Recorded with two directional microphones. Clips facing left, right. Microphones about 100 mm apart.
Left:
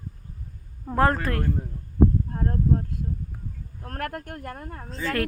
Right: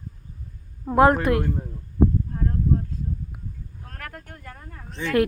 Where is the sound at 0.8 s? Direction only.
15° right (ahead or behind).